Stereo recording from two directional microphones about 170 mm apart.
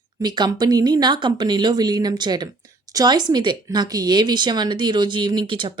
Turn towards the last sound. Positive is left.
turn(degrees=-30)  # may be behind; listen again after turning